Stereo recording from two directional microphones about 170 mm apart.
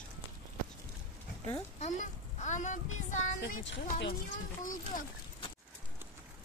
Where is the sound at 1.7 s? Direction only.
45° left (ahead or behind); by 3.8 s 75° left (ahead or behind).